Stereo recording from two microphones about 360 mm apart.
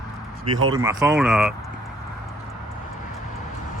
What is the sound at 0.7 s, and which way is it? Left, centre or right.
Speech, centre.